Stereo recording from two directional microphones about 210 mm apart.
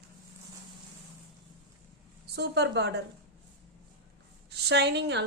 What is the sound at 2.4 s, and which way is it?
Speech, 55° right (ahead or behind).